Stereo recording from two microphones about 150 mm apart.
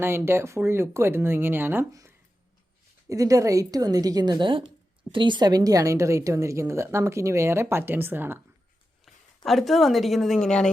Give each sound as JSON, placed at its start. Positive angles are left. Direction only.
{"t": 0.3, "sound": "speech", "side_deg": -15}
{"t": 9.0, "sound": "a woman's voice", "side_deg": 0}